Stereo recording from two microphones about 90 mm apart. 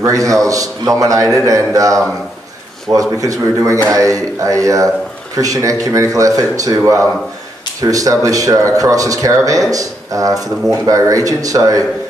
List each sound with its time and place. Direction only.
0.0 s speech: 40° right (ahead or behind)